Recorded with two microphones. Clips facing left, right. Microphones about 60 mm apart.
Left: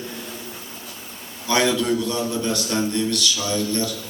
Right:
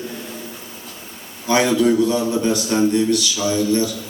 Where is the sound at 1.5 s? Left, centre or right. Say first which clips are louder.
Right 4 dB; centre.